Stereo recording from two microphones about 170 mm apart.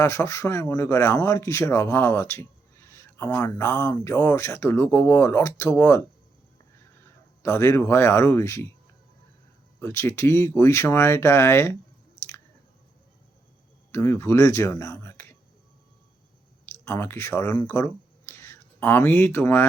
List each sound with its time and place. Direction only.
0.0 s speech: 15° left (ahead or behind)
7.4 s speech: 15° left (ahead or behind)
9.8 s speech: 15° left (ahead or behind)
13.9 s speech: 15° left (ahead or behind)
16.8 s speech: 15° left (ahead or behind)